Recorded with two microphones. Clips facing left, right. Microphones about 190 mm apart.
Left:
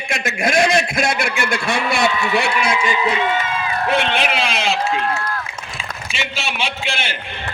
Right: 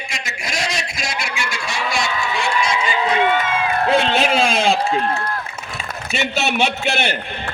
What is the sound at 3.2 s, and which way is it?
Run, 55° right (ahead or behind).